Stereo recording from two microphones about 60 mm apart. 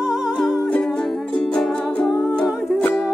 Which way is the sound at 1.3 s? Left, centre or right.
Centre.